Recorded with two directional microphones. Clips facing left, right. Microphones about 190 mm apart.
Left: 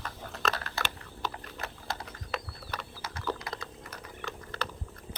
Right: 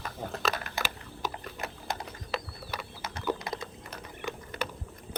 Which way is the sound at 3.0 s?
20° right (ahead or behind).